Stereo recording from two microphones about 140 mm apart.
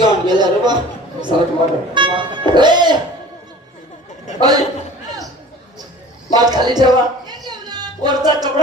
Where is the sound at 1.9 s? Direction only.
35° right (ahead or behind).